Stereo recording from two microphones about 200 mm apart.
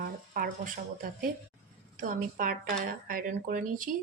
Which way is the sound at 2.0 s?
45° right (ahead or behind).